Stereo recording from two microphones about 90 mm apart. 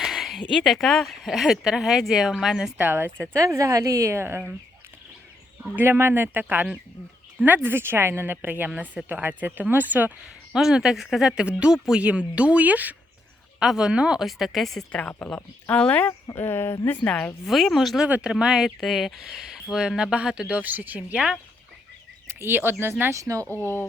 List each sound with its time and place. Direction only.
0.0 s a sound: 5° right (ahead or behind)
0.5 s speech: centre (ahead or behind)
2.7 s speech: 20° right (ahead or behind)
3.3 s a woman's voice: 35° right (ahead or behind)
5.7 s speech: 25° right (ahead or behind)
7.4 s speech: 20° right (ahead or behind)
10.5 s speech: 5° right (ahead or behind)
15.4 s speech: 20° left (ahead or behind)
16.2 s speech: 30° left (ahead or behind)
17.4 s speech: centre (ahead or behind)
22.3 s a woman's voice: 25° right (ahead or behind)